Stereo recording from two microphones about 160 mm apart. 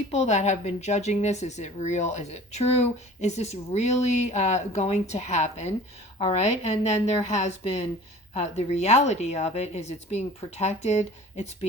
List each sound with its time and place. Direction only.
0.1 s speech: 45° left (ahead or behind)